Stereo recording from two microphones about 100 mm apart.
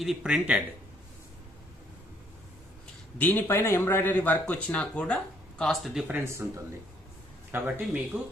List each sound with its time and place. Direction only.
0.0 s speech: 5° right (ahead or behind)
3.2 s speech: 20° left (ahead or behind); by 6.1 s centre (ahead or behind)
6.1 s speech: 25° right (ahead or behind)
7.5 s speech: 20° right (ahead or behind)